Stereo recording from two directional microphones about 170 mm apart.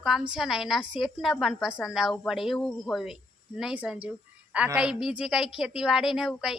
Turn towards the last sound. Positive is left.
turn(degrees=0)  # may be behind; listen again after turning